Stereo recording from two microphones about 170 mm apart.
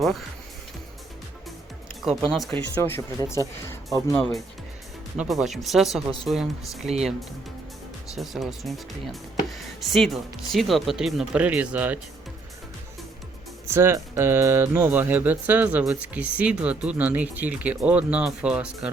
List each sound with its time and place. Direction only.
0.0 s speech: centre (ahead or behind)
2.0 s speech: centre (ahead or behind)
2.7 s speech: 15° left (ahead or behind)
4.1 s speech: 5° left (ahead or behind)
8.2 s speech: centre (ahead or behind)
13.7 s speech: 15° right (ahead or behind)